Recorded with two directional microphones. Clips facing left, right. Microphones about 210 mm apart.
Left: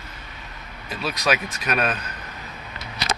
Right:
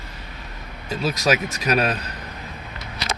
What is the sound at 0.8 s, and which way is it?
Speech, 45° right (ahead or behind).